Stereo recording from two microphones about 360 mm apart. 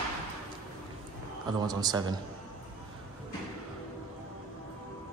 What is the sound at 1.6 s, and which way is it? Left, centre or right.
Speech, centre.